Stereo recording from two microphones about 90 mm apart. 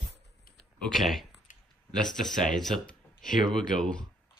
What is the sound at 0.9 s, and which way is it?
Speech, centre (ahead or behind).